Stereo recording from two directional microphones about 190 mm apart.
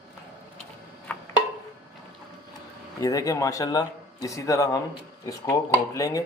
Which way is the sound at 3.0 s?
20° left (ahead or behind).